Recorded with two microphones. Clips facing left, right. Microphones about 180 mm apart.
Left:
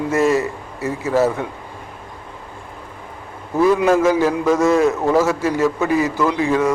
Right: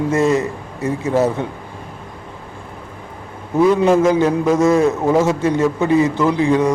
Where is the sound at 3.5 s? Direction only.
20° right (ahead or behind).